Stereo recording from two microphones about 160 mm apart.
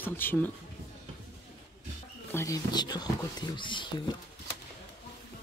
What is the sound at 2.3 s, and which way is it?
Speech, 20° left (ahead or behind).